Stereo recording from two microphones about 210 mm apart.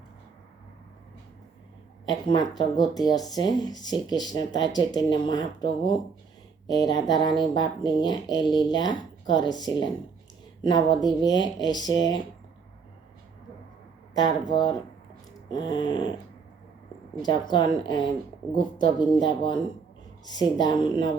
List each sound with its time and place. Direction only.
2.0 s speech: 20° left (ahead or behind)
14.1 s speech: 20° left (ahead or behind)
17.2 s speech: 20° left (ahead or behind)